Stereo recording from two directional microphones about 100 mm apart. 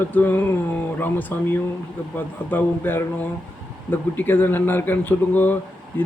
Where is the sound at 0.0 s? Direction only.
20° left (ahead or behind).